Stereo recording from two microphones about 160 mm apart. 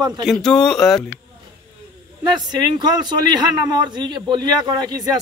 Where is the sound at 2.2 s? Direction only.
25° right (ahead or behind).